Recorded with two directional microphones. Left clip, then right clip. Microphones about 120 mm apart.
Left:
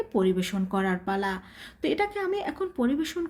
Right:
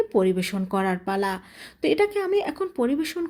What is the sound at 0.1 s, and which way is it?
Speech, 40° right (ahead or behind).